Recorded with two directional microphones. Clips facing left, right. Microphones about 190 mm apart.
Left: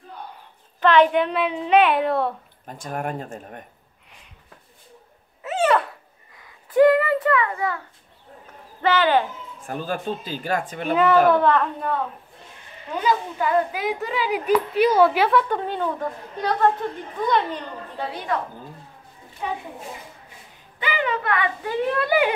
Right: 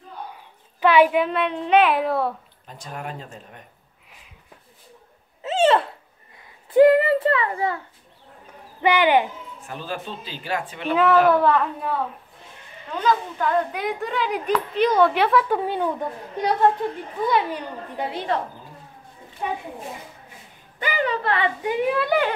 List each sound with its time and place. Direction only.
0.7 s a woman's voice: 10° right (ahead or behind)
2.6 s speech: 50° left (ahead or behind)
5.4 s a sound: 25° right (ahead or behind)
8.8 s a woman's voice: 15° right (ahead or behind)
9.7 s speech: 45° left (ahead or behind)
11.2 s a woman's voice: 5° right (ahead or behind)
12.9 s a woman's voice: 10° left (ahead or behind); by 18.4 s 25° right (ahead or behind)
20.8 s a woman's voice: 40° right (ahead or behind)
21.6 s a woman's voice: 10° right (ahead or behind)